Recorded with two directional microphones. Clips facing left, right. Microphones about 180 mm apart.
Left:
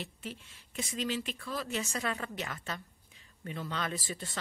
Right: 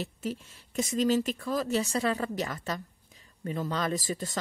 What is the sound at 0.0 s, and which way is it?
Speech, 40° right (ahead or behind).